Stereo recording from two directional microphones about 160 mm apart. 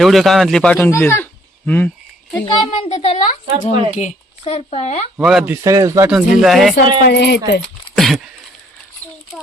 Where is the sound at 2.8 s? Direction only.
40° left (ahead or behind).